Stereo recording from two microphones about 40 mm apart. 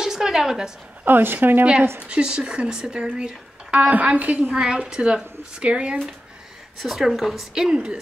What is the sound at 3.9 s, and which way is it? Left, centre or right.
Speech, right.